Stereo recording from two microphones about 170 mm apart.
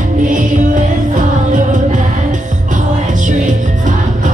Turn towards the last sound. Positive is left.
turn(degrees=-50)  # may be behind; listen again after turning